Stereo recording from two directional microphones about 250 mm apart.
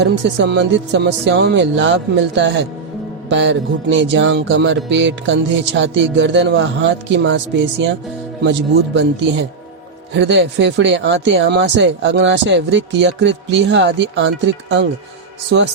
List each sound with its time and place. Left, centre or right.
0.0 s music: right
9.0 s music: right
15.4 s music: right